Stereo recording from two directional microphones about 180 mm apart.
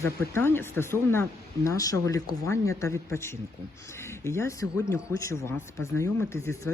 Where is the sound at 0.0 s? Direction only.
15° left (ahead or behind).